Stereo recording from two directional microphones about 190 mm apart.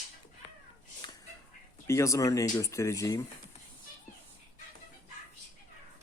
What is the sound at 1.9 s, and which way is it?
Speech, 15° left (ahead or behind).